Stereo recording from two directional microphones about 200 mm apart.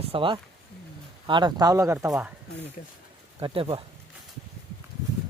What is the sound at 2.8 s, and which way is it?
Speech, 45° left (ahead or behind).